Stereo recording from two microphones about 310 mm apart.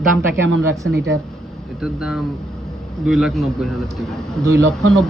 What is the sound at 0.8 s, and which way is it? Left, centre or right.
Speech, right.